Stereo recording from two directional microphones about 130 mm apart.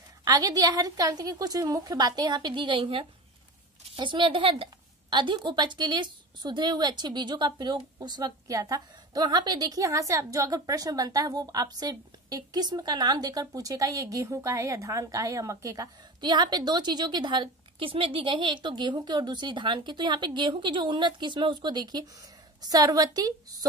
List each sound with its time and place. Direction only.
0.2 s a woman's voice: 30° right (ahead or behind)